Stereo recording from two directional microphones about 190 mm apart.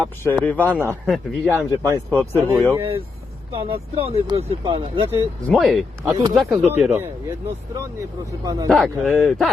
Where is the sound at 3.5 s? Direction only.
30° right (ahead or behind).